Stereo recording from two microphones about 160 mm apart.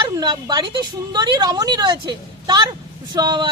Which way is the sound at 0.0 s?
30° right (ahead or behind).